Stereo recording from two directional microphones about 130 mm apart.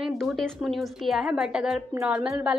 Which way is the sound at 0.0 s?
Centre (ahead or behind).